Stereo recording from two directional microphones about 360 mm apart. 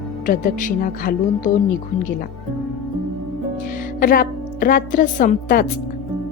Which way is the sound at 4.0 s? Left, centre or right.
Left.